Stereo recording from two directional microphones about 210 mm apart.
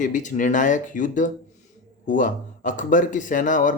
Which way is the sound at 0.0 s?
35° left (ahead or behind).